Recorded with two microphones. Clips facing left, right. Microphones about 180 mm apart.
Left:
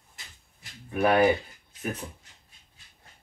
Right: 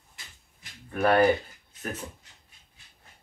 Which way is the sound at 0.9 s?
10° left (ahead or behind).